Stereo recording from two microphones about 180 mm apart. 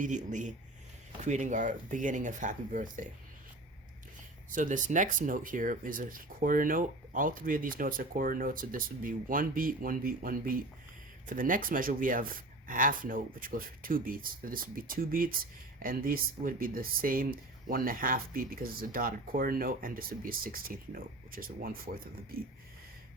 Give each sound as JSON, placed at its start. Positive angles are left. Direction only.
{"t": 0.0, "sound": "speech", "side_deg": -45}
{"t": 4.5, "sound": "speech", "side_deg": -45}